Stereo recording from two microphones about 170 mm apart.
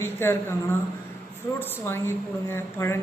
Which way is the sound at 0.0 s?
15° left (ahead or behind).